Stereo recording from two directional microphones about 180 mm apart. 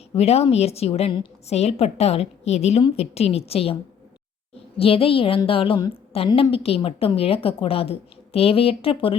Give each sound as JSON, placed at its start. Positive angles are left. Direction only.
{"t": 0.2, "sound": "a woman's voice", "side_deg": 35}
{"t": 4.8, "sound": "a woman's voice", "side_deg": 30}